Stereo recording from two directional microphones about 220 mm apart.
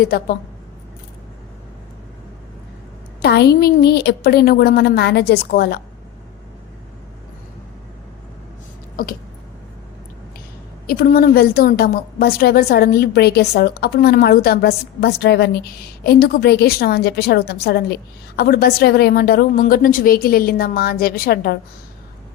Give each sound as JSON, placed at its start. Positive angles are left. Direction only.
{"t": 0.0, "sound": "a woman's voice", "side_deg": 45}
{"t": 3.2, "sound": "a woman's voice", "side_deg": 50}
{"t": 10.8, "sound": "a woman's voice", "side_deg": 40}